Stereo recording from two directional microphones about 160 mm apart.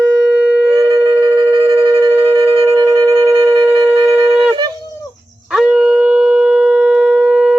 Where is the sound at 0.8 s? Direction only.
20° right (ahead or behind).